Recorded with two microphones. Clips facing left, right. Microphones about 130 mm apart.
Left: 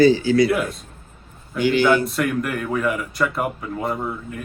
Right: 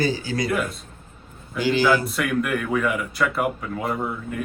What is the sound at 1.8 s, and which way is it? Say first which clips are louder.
Speech: left 2 dB; centre (ahead or behind).